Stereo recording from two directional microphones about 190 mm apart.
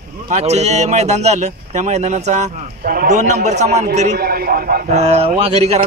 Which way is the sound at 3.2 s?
40° right (ahead or behind).